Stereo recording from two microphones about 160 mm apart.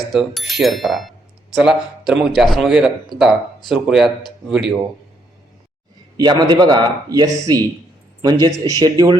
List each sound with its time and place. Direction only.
0.0 s speech: centre (ahead or behind)
6.1 s speech: 25° right (ahead or behind)